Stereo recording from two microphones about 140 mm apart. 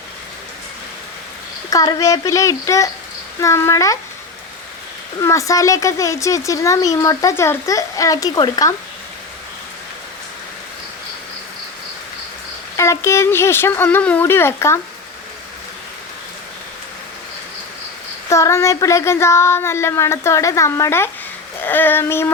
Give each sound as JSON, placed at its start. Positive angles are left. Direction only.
{"t": 1.7, "sound": "speech", "side_deg": 25}
{"t": 5.2, "sound": "speech", "side_deg": 20}
{"t": 12.7, "sound": "speech", "side_deg": 20}
{"t": 18.3, "sound": "speech", "side_deg": 20}